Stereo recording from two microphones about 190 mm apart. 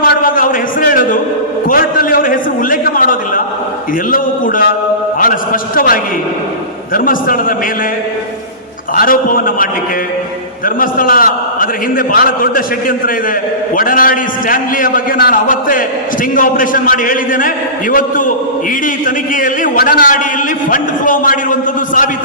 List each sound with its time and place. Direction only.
0.0 s a sound: 45° left (ahead or behind)
4.1 s a man's voice: 45° left (ahead or behind)
9.0 s a man's voice: 45° left (ahead or behind)
10.8 s a man's voice: 45° left (ahead or behind)
13.7 s a man's voice: 50° left (ahead or behind)
19.0 s a man's voice: 45° left (ahead or behind)